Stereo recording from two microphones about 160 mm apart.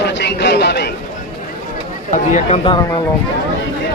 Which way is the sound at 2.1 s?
50° left (ahead or behind).